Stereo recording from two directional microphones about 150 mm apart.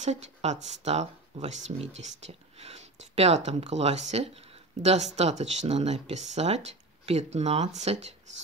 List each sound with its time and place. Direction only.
0.0 s speech: 50° right (ahead or behind)